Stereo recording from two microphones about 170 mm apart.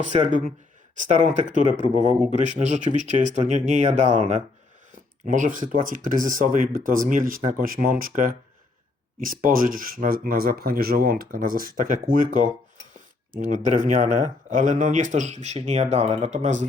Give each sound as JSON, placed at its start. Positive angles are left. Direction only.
{"t": 0.0, "sound": "speech", "side_deg": -45}